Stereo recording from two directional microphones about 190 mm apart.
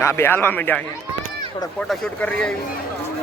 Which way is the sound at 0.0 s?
15° left (ahead or behind).